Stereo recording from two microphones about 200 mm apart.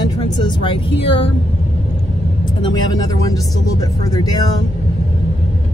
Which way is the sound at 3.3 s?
20° left (ahead or behind).